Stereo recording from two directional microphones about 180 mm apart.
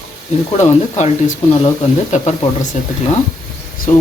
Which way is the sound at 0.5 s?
40° left (ahead or behind).